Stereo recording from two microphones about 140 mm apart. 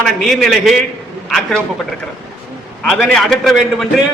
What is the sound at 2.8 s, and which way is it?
A man's voice, 5° left (ahead or behind).